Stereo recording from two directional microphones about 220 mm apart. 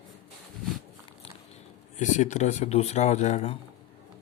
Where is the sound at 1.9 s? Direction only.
35° left (ahead or behind).